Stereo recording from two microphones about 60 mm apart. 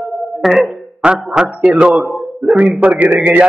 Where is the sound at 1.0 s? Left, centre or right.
Centre.